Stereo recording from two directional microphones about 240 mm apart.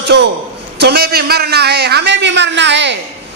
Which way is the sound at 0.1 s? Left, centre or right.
Right.